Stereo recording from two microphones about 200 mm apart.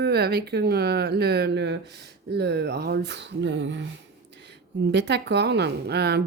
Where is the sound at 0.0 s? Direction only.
55° right (ahead or behind).